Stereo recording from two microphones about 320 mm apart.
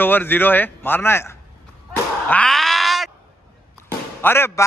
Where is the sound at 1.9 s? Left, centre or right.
Centre.